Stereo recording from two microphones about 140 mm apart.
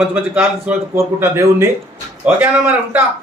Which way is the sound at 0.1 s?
15° right (ahead or behind).